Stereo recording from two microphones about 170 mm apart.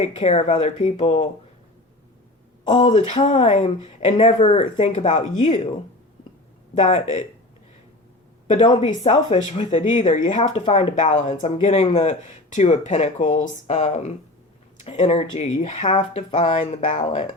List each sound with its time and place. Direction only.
0.0 s speech: 40° left (ahead or behind)
2.7 s speech: 35° left (ahead or behind)
6.7 s speech: 45° left (ahead or behind)
8.6 s speech: 30° left (ahead or behind); by 17.2 s 45° left (ahead or behind)